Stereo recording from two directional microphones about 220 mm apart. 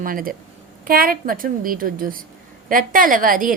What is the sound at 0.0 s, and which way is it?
A woman's voice, 40° right (ahead or behind).